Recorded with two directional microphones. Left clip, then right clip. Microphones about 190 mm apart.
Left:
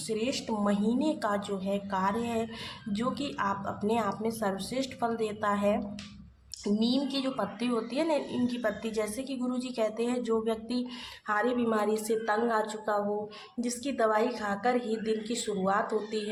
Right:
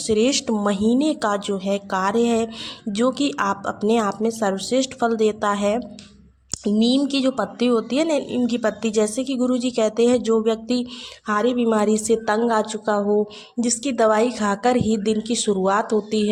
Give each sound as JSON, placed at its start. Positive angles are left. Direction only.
{"t": 0.1, "sound": "a woman's voice", "side_deg": -40}